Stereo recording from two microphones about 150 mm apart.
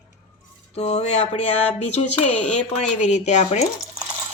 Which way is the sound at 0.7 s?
45° left (ahead or behind).